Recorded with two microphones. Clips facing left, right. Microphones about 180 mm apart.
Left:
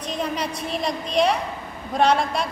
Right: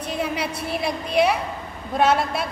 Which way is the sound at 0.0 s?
10° right (ahead or behind).